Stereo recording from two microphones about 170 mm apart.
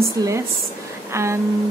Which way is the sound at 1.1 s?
15° right (ahead or behind).